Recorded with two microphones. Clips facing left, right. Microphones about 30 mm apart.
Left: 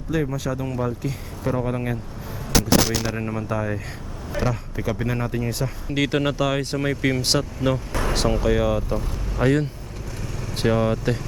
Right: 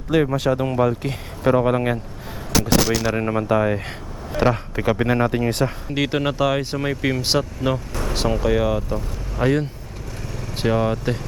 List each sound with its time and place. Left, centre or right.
0.1 s speech: right
1.5 s speech: right
2.5 s speech: centre
3.3 s speech: right
5.9 s speech: centre